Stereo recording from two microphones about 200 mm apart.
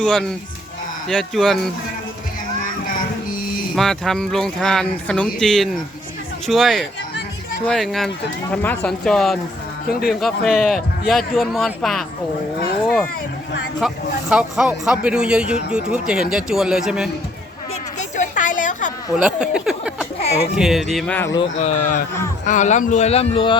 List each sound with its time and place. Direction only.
0.0 s speech: 5° left (ahead or behind)
3.8 s speech: centre (ahead or behind)
13.7 s speech: 5° right (ahead or behind)
18.2 s a sound: 40° left (ahead or behind)
19.1 s speech: 5° right (ahead or behind)
21.6 s speech: 40° left (ahead or behind)